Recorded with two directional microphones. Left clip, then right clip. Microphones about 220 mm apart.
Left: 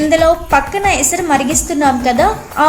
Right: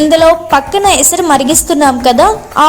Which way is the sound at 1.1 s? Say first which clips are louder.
Right 5 dB; 25° right (ahead or behind).